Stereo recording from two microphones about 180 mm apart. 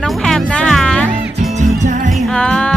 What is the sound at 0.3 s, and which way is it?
Music, 5° left (ahead or behind).